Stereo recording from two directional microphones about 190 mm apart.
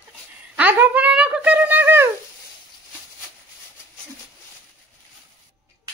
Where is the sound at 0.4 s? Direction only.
10° right (ahead or behind).